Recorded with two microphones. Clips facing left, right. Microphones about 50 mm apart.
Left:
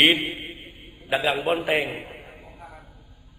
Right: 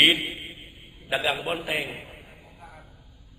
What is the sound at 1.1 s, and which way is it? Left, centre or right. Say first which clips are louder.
Speech: left 4 dB; centre.